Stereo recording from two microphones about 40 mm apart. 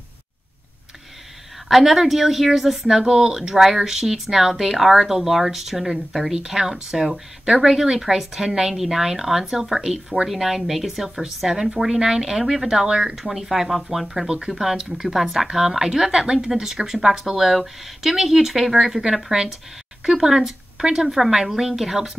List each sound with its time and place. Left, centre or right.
1.7 s a woman's voice: centre